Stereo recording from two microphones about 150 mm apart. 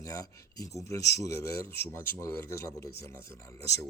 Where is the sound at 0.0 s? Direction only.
20° left (ahead or behind).